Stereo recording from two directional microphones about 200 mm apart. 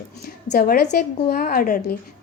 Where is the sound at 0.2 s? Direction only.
55° left (ahead or behind).